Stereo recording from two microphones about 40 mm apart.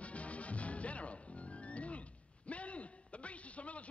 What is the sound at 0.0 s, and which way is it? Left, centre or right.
Music, left.